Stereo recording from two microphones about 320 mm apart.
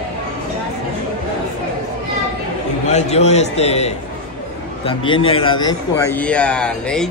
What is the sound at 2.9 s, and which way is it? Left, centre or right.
A man's voice, left.